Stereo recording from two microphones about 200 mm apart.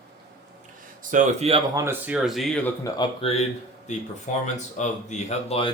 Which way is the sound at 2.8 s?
25° left (ahead or behind).